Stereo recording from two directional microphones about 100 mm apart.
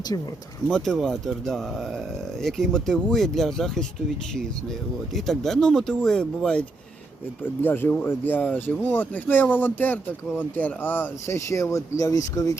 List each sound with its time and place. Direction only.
0.7 s speech: 5° left (ahead or behind)
5.1 s speech: centre (ahead or behind)
7.6 s speech: 20° left (ahead or behind)